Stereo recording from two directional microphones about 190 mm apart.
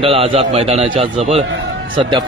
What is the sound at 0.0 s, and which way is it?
A man's voice, 30° right (ahead or behind).